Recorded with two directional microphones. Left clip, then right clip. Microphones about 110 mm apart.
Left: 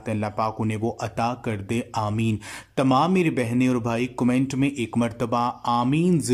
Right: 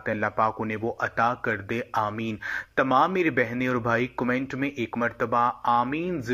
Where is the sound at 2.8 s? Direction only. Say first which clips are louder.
Left 1 dB; 5° left (ahead or behind).